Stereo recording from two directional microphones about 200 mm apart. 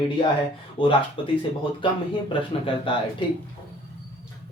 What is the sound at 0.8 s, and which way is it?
Speech, 25° left (ahead or behind).